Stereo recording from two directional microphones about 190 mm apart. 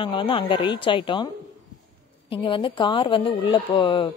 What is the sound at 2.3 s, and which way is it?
Speech, 25° left (ahead or behind).